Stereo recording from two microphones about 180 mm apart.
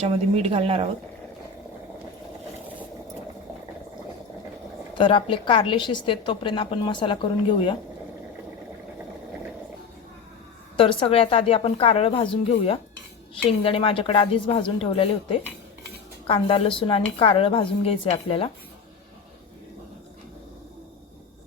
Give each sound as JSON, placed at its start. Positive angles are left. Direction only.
{"t": 0.0, "sound": "speech", "side_deg": -35}
{"t": 4.9, "sound": "a woman's voice", "side_deg": 30}
{"t": 10.8, "sound": "a woman's voice", "side_deg": 30}